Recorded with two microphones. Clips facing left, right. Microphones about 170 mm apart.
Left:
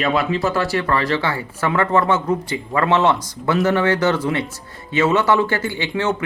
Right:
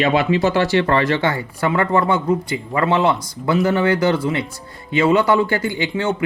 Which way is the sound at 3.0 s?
10° right (ahead or behind).